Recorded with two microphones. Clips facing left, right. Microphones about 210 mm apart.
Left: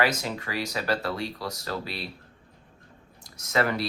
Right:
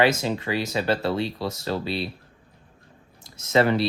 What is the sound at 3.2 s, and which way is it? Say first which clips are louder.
Speech: right 6 dB; 25° right (ahead or behind).